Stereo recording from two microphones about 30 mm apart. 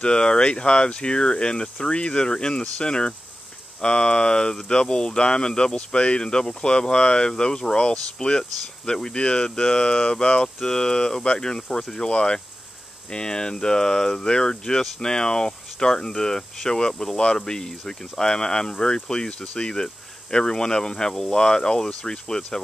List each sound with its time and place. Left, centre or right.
0.0 s speech: left